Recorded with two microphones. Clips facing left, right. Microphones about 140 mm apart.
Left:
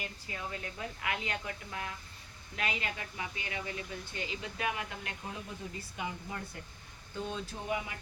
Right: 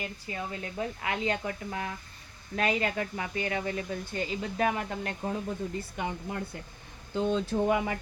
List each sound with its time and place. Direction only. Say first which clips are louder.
0.3 s speech: right 4 dB; 30° right (ahead or behind)
2.6 s speech: right 9 dB; 45° right (ahead or behind)
6.0 s speech: right 4 dB; 60° right (ahead or behind)
7.1 s speech: right 11 dB; 80° right